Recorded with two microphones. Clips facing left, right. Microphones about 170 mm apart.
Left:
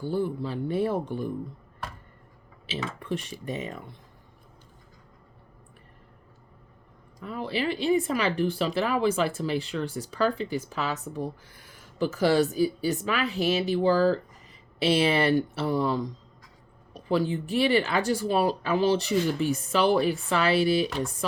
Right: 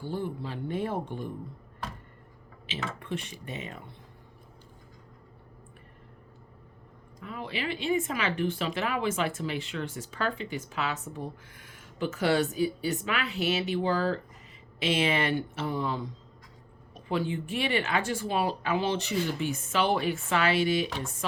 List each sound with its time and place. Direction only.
0.0 s speech: 40° left (ahead or behind)
3.0 s speech: 40° left (ahead or behind)
7.3 s speech: 35° left (ahead or behind)